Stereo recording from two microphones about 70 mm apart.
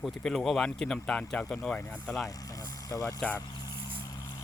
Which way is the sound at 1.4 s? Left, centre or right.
Centre.